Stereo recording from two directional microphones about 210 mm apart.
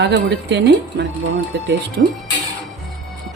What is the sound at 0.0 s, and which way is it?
Speech, 55° right (ahead or behind).